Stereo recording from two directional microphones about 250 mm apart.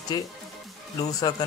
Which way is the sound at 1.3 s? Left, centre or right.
Centre.